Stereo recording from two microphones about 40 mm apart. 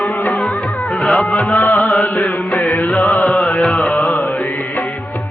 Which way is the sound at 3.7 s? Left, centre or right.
Left.